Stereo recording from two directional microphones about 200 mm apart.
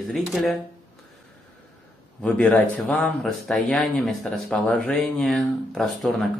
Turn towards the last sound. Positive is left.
turn(degrees=0)  # may be behind; listen again after turning